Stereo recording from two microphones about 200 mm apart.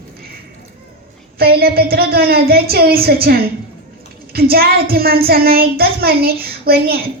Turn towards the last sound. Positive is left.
turn(degrees=-50)  # may be behind; listen again after turning